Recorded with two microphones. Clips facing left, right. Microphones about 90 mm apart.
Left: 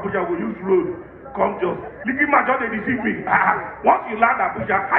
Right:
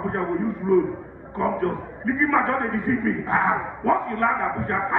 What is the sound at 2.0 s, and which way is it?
Speech, 75° left (ahead or behind).